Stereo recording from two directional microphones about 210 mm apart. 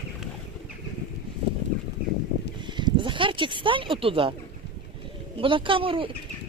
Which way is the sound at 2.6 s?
20° right (ahead or behind).